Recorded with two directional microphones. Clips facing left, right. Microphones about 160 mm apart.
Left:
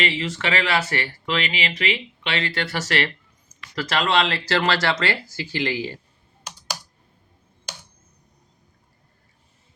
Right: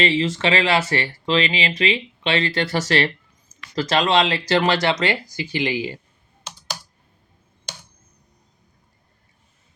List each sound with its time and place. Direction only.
0.0 s speech: 30° right (ahead or behind)